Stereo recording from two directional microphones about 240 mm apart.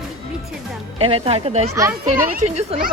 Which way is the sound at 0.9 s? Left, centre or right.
Right.